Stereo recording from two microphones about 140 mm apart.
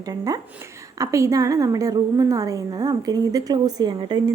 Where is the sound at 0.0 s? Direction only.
25° right (ahead or behind).